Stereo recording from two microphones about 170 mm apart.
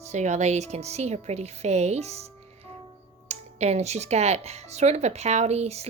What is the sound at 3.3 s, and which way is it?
Speech, 40° right (ahead or behind).